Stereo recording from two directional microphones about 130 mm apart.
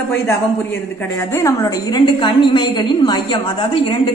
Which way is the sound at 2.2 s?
35° left (ahead or behind).